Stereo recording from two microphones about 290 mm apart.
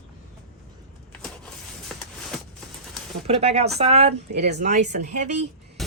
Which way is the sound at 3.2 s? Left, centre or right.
Right.